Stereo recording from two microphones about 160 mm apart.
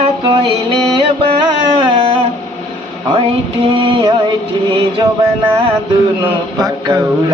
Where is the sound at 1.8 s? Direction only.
35° right (ahead or behind).